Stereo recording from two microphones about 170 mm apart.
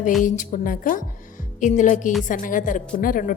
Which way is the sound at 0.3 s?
45° left (ahead or behind).